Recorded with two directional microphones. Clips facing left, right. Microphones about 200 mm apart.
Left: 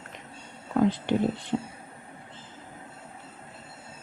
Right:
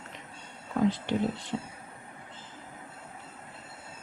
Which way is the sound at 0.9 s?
55° left (ahead or behind).